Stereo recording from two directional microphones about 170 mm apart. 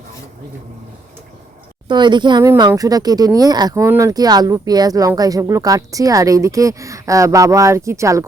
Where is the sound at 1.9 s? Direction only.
25° right (ahead or behind).